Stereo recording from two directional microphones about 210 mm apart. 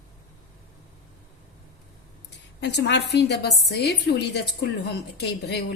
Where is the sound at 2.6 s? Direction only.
55° left (ahead or behind).